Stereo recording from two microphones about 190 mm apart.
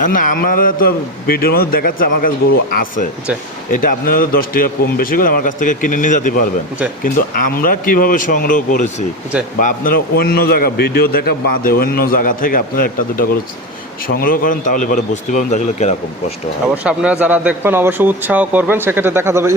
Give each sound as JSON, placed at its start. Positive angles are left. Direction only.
{"t": 0.0, "sound": "a man's voice", "side_deg": 45}
{"t": 16.7, "sound": "speech", "side_deg": -5}